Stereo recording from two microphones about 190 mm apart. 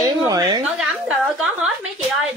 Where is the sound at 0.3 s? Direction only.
20° right (ahead or behind).